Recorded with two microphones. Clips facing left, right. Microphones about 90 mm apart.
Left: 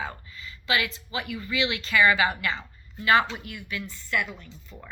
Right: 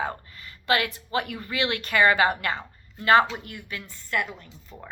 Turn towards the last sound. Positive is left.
turn(degrees=-40)  # may be behind; listen again after turning